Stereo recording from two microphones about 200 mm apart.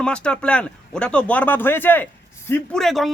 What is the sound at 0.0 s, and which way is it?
A man's voice, 5° left (ahead or behind).